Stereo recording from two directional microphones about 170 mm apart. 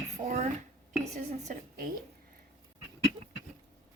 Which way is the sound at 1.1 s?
50° right (ahead or behind).